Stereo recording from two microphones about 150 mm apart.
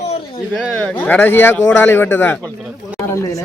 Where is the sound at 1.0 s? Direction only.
15° left (ahead or behind).